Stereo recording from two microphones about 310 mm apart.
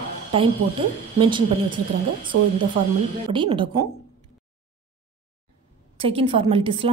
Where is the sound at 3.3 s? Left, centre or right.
Centre.